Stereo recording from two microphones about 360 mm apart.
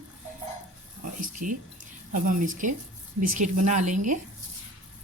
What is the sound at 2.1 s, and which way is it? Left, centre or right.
A woman's voice, right.